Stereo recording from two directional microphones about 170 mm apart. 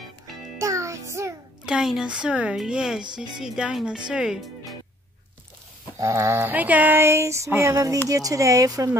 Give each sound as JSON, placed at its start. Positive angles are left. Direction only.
{"t": 0.6, "sound": "music", "side_deg": -15}
{"t": 1.7, "sound": "a woman's voice", "side_deg": -5}
{"t": 5.9, "sound": "a sound", "side_deg": -20}
{"t": 8.1, "sound": "speech", "side_deg": -20}